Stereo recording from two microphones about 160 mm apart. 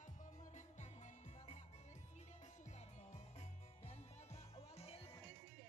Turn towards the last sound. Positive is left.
turn(degrees=40)  # may be behind; listen again after turning